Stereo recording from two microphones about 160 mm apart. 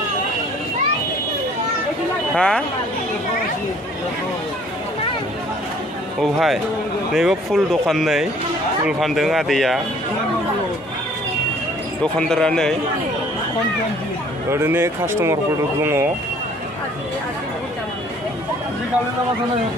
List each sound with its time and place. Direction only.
2.3 s speech: 5° left (ahead or behind)
6.2 s speech: centre (ahead or behind)
12.0 s speech: 5° left (ahead or behind)
14.5 s speech: 15° right (ahead or behind)